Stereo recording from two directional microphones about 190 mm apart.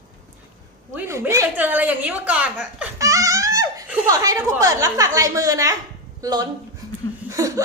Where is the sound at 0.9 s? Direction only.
15° right (ahead or behind).